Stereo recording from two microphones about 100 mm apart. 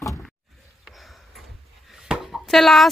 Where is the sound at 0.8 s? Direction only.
Centre (ahead or behind).